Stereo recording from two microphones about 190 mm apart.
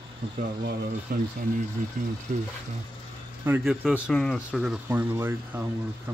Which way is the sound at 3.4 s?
5° right (ahead or behind).